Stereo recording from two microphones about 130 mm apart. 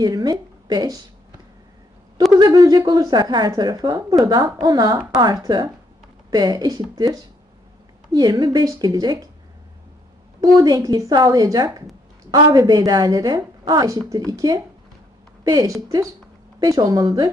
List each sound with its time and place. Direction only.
0.0 s a woman's voice: 30° right (ahead or behind)
2.3 s a woman's voice: 30° right (ahead or behind)
10.4 s speech: 30° right (ahead or behind)